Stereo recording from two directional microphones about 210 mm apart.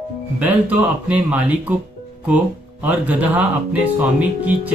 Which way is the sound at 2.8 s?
10° right (ahead or behind).